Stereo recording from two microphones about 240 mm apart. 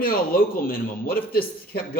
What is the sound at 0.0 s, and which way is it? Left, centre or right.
A man's voice, left.